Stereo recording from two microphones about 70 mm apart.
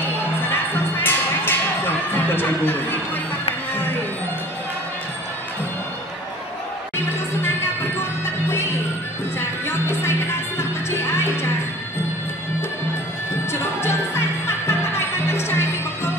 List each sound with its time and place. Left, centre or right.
1.0 s a sound: left
9.4 s music: left
13.5 s music: left